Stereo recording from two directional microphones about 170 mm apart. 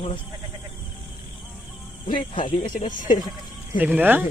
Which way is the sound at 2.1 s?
30° left (ahead or behind).